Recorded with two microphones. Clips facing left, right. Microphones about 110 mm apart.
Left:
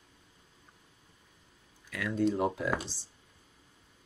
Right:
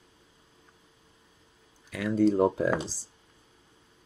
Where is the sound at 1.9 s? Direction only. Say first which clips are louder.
Right 6 dB; 35° right (ahead or behind).